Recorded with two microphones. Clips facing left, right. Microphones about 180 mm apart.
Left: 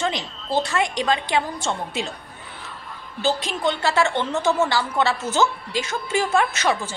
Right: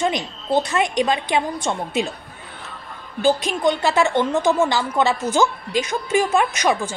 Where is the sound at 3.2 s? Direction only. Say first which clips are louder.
Right 5 dB; 15° right (ahead or behind).